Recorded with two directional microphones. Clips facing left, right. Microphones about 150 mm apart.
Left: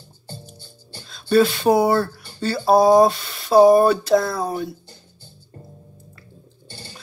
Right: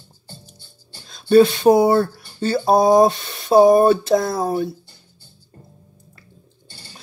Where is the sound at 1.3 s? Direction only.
20° right (ahead or behind).